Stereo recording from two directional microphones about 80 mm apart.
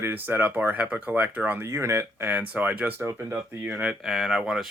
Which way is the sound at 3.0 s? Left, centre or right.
Right.